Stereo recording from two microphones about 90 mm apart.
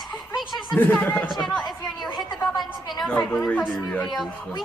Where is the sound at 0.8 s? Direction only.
20° left (ahead or behind).